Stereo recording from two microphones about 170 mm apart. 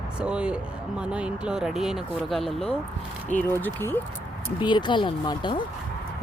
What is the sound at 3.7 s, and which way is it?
Speech, 10° left (ahead or behind).